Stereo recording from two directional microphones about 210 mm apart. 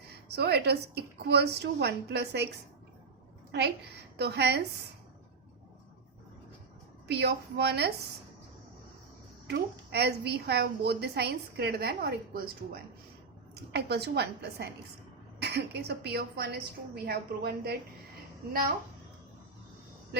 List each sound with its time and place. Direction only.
0.3 s a woman's voice: 50° right (ahead or behind)
4.2 s a woman's voice: 50° right (ahead or behind)
7.1 s a woman's voice: 50° right (ahead or behind)
9.5 s a woman's voice: 50° right (ahead or behind)